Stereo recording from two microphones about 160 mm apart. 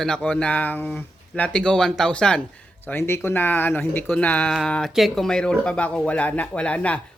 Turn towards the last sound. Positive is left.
turn(degrees=5)  # may be behind; listen again after turning